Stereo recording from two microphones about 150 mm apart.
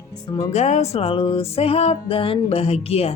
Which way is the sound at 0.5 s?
50° left (ahead or behind).